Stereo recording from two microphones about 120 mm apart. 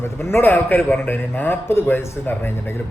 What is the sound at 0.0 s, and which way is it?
A man's voice, 20° left (ahead or behind).